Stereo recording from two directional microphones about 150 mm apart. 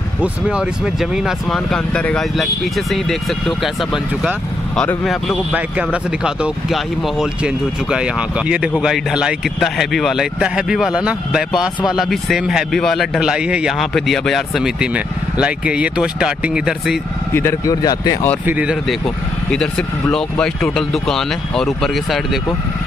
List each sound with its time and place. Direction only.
0.2 s speech: 5° right (ahead or behind)
17.3 s speech: 15° left (ahead or behind)
18.4 s speech: 10° right (ahead or behind)
19.0 s speech: 5° left (ahead or behind)